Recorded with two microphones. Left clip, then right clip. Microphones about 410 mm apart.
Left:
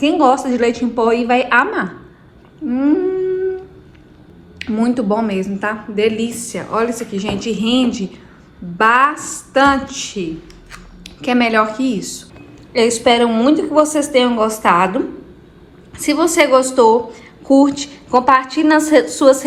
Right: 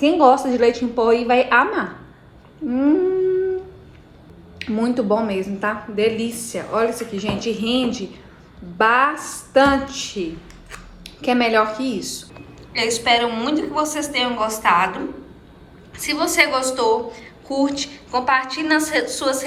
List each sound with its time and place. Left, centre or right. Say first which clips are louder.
0.0 s a woman's voice: left 1 dB; centre
4.6 s a woman's voice: left 3 dB; centre
12.7 s a woman's voice: left 5 dB; centre